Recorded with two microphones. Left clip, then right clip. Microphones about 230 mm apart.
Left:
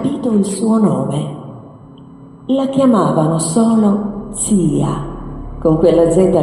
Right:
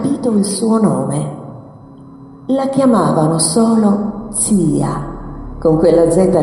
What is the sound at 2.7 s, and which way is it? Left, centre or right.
A man's voice, right.